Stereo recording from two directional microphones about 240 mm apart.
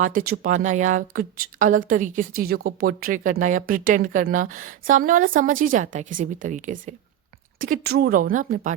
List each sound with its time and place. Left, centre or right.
0.0 s a woman's voice: right